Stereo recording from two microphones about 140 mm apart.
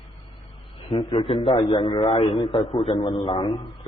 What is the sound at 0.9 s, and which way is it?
A man's voice, 45° left (ahead or behind).